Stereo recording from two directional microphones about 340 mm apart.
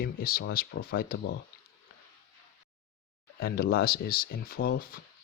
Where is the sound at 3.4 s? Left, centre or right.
Left.